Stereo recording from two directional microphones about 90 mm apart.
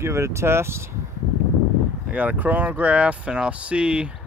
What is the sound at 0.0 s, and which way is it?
Speech, 30° right (ahead or behind).